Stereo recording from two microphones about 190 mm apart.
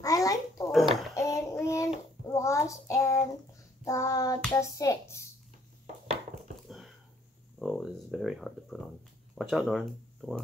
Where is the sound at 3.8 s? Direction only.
15° left (ahead or behind).